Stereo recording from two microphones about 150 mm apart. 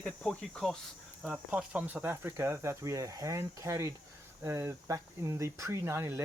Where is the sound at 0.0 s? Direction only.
5° left (ahead or behind).